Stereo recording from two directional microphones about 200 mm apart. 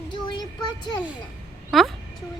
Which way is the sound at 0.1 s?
20° left (ahead or behind).